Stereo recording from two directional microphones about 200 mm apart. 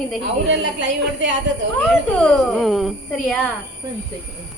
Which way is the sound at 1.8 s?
Centre (ahead or behind).